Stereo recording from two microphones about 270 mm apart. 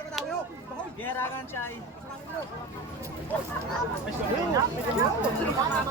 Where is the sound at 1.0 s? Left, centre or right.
Centre.